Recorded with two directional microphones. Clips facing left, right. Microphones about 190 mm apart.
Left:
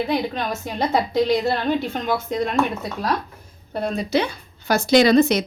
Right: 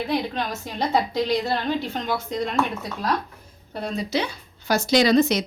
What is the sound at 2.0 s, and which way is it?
Speech, 50° left (ahead or behind).